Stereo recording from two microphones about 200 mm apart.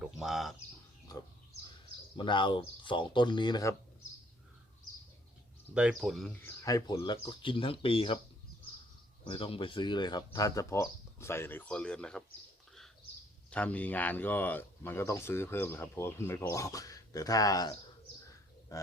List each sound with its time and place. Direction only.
0.0 s speech: centre (ahead or behind)
2.1 s speech: 25° left (ahead or behind)
5.7 s speech: 5° right (ahead or behind)
6.6 s speech: 15° left (ahead or behind)
9.2 s speech: 25° left (ahead or behind); by 12.2 s 5° left (ahead or behind)
13.5 s speech: 5° left (ahead or behind)